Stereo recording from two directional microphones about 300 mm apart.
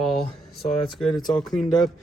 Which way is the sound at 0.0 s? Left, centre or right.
Centre.